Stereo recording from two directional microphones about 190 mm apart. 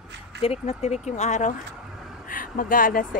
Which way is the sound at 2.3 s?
45° left (ahead or behind).